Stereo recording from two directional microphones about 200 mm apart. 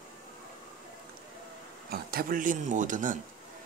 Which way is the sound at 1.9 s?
45° right (ahead or behind).